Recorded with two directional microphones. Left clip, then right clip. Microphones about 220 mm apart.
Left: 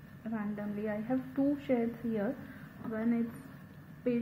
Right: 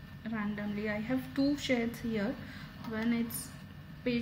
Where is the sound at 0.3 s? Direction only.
10° right (ahead or behind).